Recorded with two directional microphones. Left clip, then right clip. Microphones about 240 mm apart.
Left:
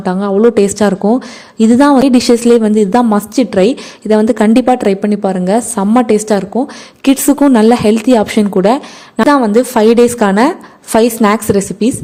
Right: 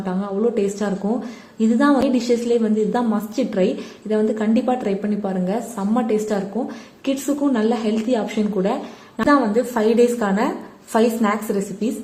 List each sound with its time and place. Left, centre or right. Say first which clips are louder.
0.0 s a woman's voice: left 12 dB; left